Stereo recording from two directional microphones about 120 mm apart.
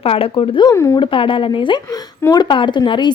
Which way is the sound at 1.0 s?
45° left (ahead or behind).